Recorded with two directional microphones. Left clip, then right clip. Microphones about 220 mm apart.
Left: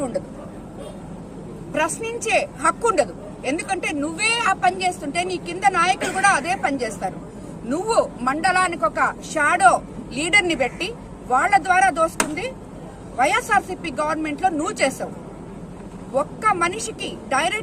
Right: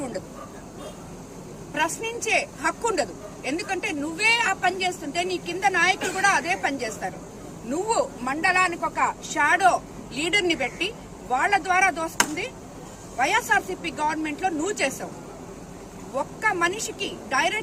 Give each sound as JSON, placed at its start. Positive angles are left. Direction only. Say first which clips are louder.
{"t": 1.7, "sound": "speech", "louder": "left 3 dB", "side_deg": -5}
{"t": 16.1, "sound": "speech", "louder": "left 5 dB", "side_deg": 0}